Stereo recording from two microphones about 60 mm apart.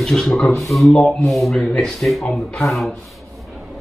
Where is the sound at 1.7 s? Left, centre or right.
Centre.